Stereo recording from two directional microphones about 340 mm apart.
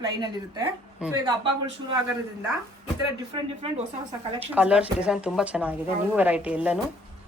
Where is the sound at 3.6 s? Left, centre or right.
Centre.